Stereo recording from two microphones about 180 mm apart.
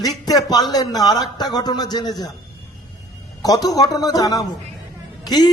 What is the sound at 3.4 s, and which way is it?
A man's voice, 20° left (ahead or behind).